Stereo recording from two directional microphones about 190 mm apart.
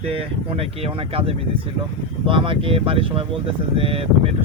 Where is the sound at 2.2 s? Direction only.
25° right (ahead or behind).